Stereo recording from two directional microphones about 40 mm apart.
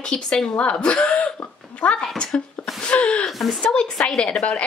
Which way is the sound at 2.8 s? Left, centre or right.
Left.